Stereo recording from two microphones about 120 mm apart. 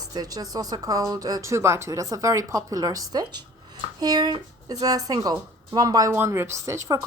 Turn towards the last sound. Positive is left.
turn(degrees=-25)  # may be behind; listen again after turning